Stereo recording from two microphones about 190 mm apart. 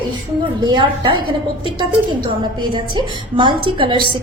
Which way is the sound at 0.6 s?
25° right (ahead or behind).